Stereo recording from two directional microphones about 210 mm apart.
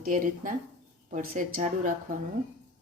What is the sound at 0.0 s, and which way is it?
Speech, 40° right (ahead or behind).